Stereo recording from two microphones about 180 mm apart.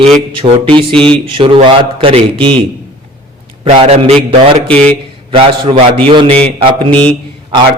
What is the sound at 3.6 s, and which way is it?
Speech, 35° right (ahead or behind).